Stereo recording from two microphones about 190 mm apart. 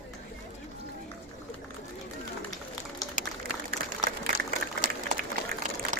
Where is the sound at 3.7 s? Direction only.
50° right (ahead or behind).